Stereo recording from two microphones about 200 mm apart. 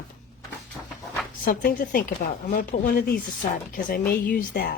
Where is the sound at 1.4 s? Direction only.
45° left (ahead or behind).